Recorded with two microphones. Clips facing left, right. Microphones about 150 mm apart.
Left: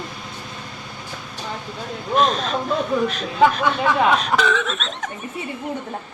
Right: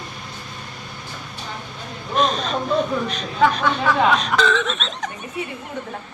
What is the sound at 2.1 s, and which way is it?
Speech, centre (ahead or behind).